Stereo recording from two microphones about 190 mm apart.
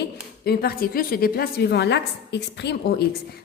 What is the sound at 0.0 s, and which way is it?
A woman's voice, 55° left (ahead or behind).